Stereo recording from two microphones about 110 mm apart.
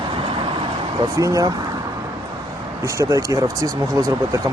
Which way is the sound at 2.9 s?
30° right (ahead or behind).